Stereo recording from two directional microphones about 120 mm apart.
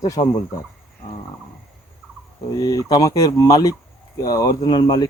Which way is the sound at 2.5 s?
30° left (ahead or behind).